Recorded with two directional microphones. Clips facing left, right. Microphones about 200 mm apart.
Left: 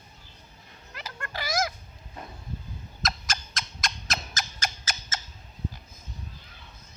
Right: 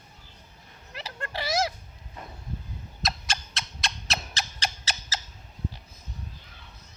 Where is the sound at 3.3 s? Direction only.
30° right (ahead or behind).